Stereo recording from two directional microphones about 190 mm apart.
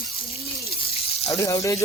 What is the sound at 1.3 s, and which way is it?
Speech, 15° left (ahead or behind).